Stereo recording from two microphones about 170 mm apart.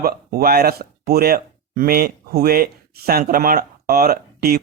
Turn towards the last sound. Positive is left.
turn(degrees=-65)  # may be behind; listen again after turning